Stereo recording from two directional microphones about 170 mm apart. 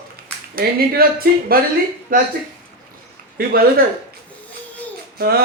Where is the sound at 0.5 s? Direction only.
60° right (ahead or behind).